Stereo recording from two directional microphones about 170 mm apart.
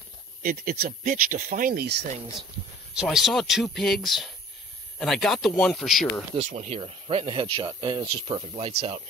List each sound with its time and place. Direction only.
0.4 s speech: 60° right (ahead or behind)
2.9 s speech: 5° right (ahead or behind)
6.3 s speech: 40° right (ahead or behind)